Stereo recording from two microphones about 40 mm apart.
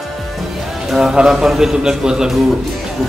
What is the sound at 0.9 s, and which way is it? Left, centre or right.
Speech, centre.